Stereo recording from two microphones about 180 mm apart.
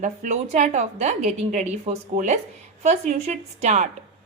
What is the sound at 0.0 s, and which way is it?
A woman's voice, 45° right (ahead or behind).